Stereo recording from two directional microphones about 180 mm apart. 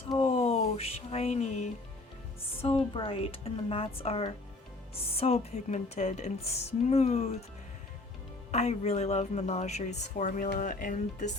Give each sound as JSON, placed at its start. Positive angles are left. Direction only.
{"t": 0.1, "sound": "music", "side_deg": 35}
{"t": 2.6, "sound": "a woman's voice", "side_deg": 30}
{"t": 8.5, "sound": "a woman's voice", "side_deg": 35}